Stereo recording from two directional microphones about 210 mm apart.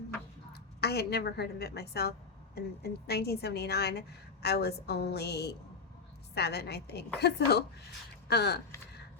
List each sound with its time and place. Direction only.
0.5 s a woman's voice: 50° left (ahead or behind)